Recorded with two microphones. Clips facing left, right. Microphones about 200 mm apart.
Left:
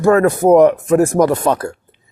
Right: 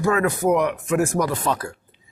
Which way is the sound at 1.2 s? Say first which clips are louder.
Left 9 dB; 55° left (ahead or behind).